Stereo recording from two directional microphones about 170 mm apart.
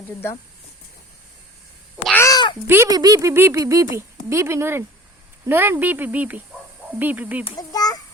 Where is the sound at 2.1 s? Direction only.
20° left (ahead or behind).